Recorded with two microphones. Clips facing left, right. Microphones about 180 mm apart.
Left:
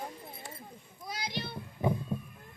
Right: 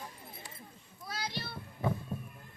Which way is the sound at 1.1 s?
15° left (ahead or behind).